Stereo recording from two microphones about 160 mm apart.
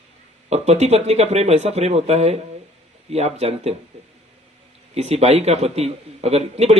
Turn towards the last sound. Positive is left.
turn(degrees=-40)  # may be behind; listen again after turning